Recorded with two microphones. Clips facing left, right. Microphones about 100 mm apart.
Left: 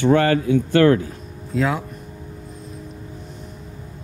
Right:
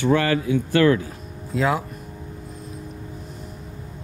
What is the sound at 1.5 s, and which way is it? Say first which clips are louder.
Speech: even; centre (ahead or behind).